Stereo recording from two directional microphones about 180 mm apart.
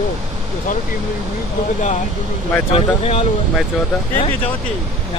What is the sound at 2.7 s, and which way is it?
Speech, 30° left (ahead or behind).